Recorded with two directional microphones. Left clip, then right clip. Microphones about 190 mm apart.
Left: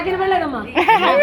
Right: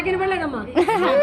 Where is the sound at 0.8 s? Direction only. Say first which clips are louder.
Left 5 dB; 15° right (ahead or behind).